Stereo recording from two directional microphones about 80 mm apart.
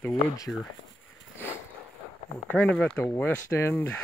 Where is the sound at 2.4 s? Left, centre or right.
Centre.